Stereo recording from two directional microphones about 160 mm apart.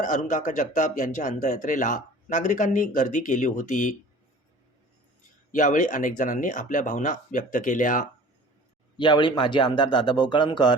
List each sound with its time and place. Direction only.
0.0 s speech: 50° left (ahead or behind)
5.5 s speech: 55° left (ahead or behind)
9.0 s speech: 30° left (ahead or behind)